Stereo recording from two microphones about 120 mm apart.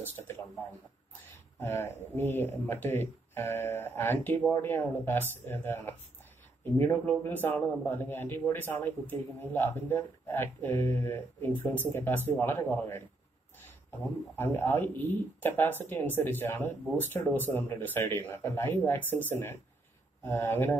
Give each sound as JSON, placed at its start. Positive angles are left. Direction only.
{"t": 1.6, "sound": "a man's voice", "side_deg": 20}
{"t": 14.3, "sound": "a man's voice", "side_deg": 20}